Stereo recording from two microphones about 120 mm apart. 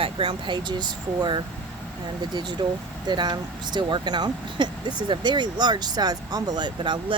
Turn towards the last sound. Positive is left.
turn(degrees=-35)  # may be behind; listen again after turning